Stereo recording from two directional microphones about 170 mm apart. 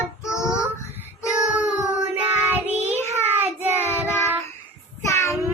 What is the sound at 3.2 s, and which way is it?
Child singing, 10° right (ahead or behind).